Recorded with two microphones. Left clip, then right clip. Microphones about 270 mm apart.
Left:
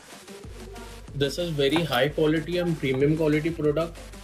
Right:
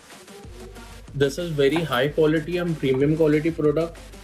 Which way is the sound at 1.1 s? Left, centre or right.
Right.